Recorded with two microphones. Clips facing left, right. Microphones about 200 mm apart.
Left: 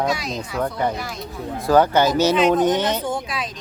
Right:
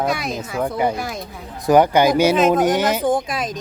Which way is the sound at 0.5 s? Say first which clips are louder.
Right 2 dB; 10° right (ahead or behind).